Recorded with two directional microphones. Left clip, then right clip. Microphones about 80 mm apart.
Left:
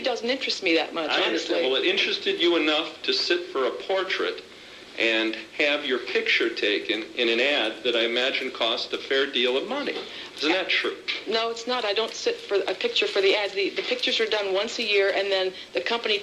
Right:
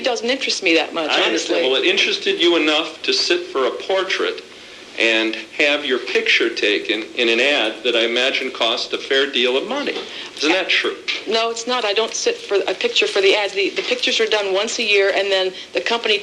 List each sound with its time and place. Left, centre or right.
0.0 s speech: right